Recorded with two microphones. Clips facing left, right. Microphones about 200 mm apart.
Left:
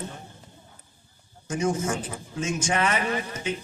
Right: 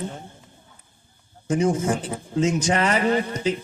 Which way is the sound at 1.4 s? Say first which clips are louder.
Right 5 dB; 30° right (ahead or behind).